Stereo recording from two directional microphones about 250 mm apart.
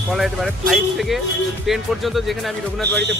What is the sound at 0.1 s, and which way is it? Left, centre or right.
Speech, centre.